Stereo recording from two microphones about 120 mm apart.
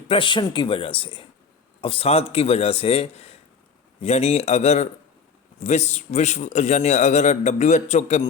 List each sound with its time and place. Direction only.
0.1 s a man's voice: 45° left (ahead or behind); by 8.3 s 65° left (ahead or behind)